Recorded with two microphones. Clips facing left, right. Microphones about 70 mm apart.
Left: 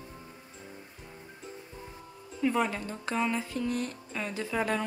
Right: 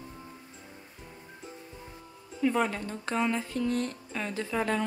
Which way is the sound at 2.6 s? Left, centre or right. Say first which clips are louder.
Right 1 dB; centre.